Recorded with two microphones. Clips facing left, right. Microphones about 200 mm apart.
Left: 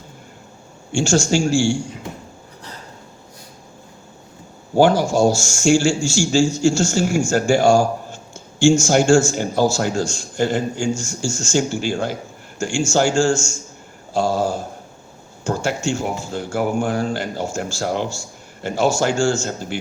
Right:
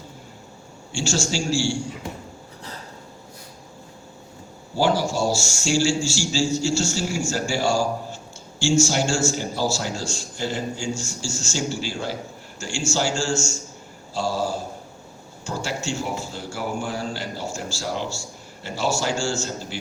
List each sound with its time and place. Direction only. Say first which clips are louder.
0.9 s a man's voice: left 8 dB; 50° left (ahead or behind)
4.7 s a man's voice: left 7 dB; 50° left (ahead or behind)